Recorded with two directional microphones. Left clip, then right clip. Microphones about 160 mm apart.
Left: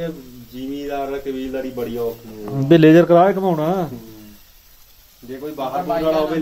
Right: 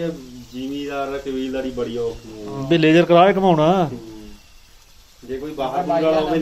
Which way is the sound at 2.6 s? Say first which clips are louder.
Left 4 dB; 65° left (ahead or behind).